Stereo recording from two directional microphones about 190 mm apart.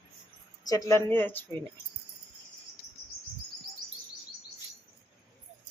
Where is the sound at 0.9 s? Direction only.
10° left (ahead or behind).